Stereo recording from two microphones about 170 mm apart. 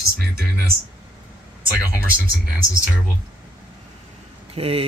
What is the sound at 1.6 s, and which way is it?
Speech, 60° right (ahead or behind).